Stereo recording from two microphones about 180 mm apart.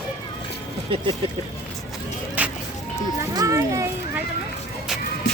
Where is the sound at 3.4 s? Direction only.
20° right (ahead or behind).